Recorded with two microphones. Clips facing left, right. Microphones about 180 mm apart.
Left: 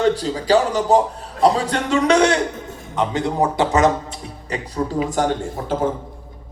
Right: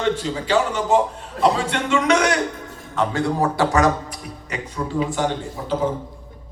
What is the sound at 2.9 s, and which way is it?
A man's voice, 20° left (ahead or behind).